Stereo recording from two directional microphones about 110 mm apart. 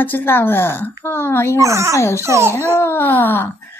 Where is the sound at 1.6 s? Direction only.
25° right (ahead or behind).